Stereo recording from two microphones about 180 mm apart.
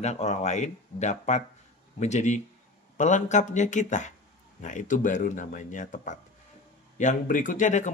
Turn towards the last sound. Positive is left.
turn(degrees=45)  # may be behind; listen again after turning